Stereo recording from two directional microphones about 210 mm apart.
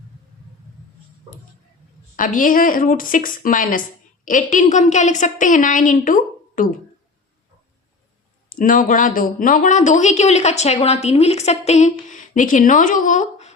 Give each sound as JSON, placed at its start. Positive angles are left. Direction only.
{"t": 2.1, "sound": "a woman's voice", "side_deg": 40}
{"t": 8.4, "sound": "a woman's voice", "side_deg": 40}